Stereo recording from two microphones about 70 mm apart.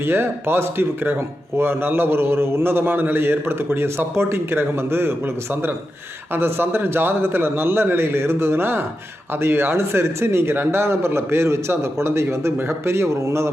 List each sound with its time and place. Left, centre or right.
0.0 s a man's voice: right